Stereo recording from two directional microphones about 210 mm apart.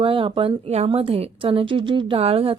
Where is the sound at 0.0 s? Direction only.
25° right (ahead or behind).